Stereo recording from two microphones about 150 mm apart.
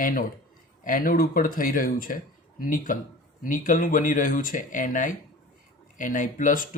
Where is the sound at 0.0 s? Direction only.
65° left (ahead or behind).